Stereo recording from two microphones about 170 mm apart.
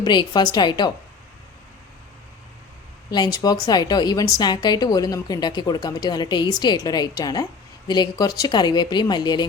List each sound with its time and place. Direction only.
0.0 s a woman's voice: 25° left (ahead or behind)
3.1 s a woman's voice: 25° left (ahead or behind)